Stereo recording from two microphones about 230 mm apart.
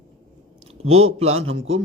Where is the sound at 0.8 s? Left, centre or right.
Right.